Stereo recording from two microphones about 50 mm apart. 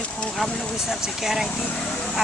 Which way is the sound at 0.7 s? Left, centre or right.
Centre.